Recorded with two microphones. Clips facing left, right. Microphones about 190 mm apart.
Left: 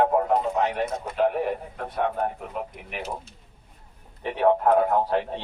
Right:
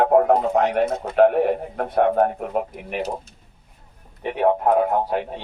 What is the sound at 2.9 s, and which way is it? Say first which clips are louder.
Speech: right 7 dB; 45° right (ahead or behind).